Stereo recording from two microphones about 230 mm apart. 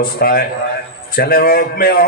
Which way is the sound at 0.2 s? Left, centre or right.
Left.